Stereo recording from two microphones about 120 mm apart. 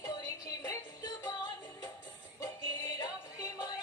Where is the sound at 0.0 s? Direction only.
25° left (ahead or behind).